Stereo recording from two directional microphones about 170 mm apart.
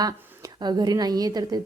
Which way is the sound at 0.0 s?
25° right (ahead or behind).